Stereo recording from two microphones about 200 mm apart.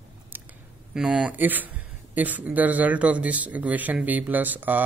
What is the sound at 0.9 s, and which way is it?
Speech, 5° right (ahead or behind).